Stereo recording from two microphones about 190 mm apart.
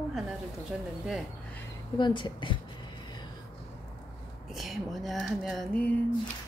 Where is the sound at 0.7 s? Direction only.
Centre (ahead or behind).